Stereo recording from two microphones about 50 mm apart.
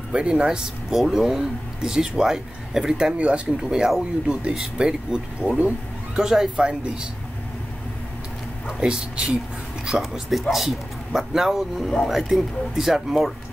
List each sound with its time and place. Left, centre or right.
0.1 s speech: centre
0.8 s speech: centre
8.8 s speech: centre